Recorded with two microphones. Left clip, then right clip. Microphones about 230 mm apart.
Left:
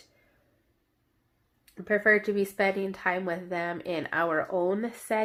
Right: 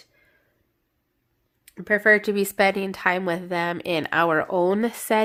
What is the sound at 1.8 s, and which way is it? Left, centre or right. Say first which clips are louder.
Speech: right 5 dB; right.